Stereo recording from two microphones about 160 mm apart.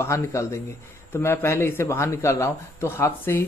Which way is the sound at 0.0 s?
20° left (ahead or behind).